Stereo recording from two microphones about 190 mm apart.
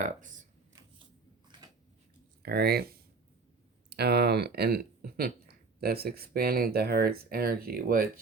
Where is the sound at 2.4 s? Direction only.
55° right (ahead or behind).